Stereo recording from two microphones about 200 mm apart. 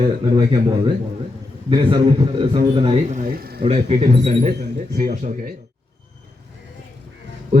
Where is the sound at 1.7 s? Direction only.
25° right (ahead or behind); by 3.6 s 50° right (ahead or behind).